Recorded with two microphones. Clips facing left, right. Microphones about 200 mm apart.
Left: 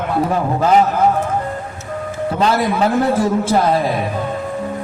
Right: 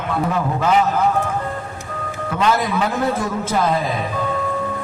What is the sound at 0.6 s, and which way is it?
Speech, 35° left (ahead or behind).